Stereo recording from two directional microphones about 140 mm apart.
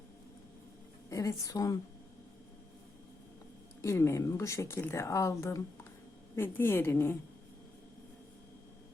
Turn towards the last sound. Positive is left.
turn(degrees=15)  # may be behind; listen again after turning